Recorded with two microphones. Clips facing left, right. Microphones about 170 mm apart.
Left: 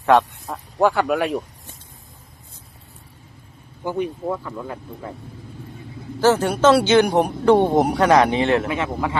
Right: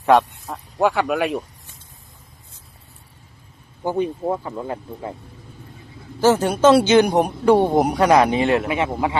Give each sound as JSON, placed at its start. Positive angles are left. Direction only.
{"t": 0.0, "sound": "speech", "side_deg": -15}
{"t": 0.4, "sound": "speech", "side_deg": -5}
{"t": 3.8, "sound": "speech", "side_deg": -25}
{"t": 6.1, "sound": "speech", "side_deg": -15}